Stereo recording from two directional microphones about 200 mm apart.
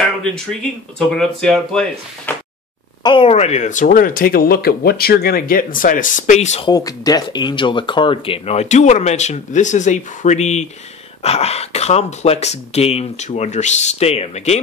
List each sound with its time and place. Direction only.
0.2 s speech: 5° left (ahead or behind)
3.0 s speech: 25° left (ahead or behind)
6.7 s speech: 20° left (ahead or behind)